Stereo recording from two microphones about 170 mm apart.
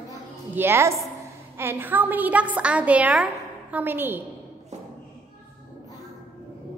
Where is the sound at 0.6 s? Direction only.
15° right (ahead or behind).